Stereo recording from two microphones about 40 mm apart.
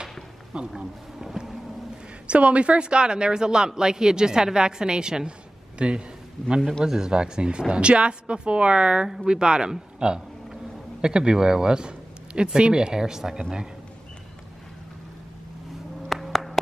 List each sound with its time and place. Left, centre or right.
0.5 s speech: centre
2.2 s speech: right
16.1 s a sound: centre